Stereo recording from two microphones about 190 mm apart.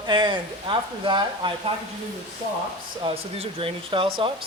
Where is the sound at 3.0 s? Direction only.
30° right (ahead or behind).